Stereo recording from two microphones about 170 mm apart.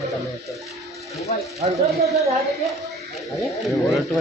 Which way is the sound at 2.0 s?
20° right (ahead or behind).